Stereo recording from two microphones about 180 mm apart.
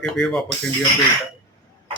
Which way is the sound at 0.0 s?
Centre (ahead or behind).